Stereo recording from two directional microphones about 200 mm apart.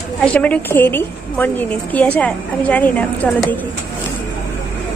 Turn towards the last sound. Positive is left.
turn(degrees=5)  # may be behind; listen again after turning